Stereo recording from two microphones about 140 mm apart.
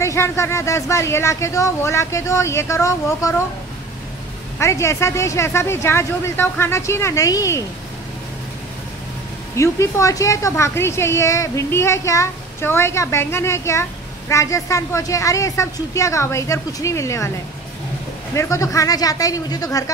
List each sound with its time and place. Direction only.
0.0 s a woman's voice: 20° left (ahead or behind)
4.6 s a woman's voice: 20° left (ahead or behind)
9.6 s a woman's voice: 20° left (ahead or behind)
18.3 s a woman's voice: 20° left (ahead or behind)